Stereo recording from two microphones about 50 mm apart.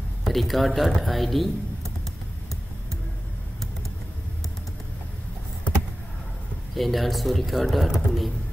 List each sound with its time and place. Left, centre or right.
0.2 s speech: centre
6.7 s speech: centre